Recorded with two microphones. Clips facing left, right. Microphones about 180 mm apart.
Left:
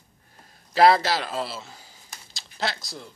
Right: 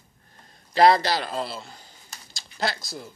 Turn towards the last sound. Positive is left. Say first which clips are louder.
# right 1 dB
turn(degrees=0)  # may be behind; listen again after turning